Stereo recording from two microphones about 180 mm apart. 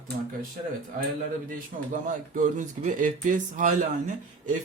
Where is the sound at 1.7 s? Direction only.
50° right (ahead or behind).